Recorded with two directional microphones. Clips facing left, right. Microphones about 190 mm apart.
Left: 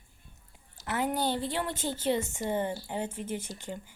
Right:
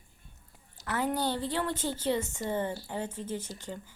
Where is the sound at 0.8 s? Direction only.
20° left (ahead or behind).